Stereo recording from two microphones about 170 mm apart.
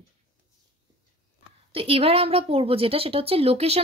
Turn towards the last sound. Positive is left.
turn(degrees=-35)  # may be behind; listen again after turning